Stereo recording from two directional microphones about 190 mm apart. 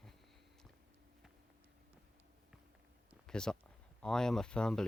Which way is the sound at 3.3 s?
5° left (ahead or behind).